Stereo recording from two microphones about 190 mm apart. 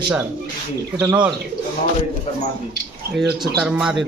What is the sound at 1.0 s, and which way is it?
Speech, 10° right (ahead or behind).